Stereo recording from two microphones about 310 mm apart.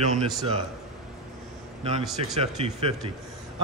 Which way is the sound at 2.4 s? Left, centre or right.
Centre.